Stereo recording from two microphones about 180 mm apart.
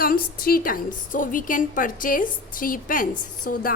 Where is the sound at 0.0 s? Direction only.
55° left (ahead or behind).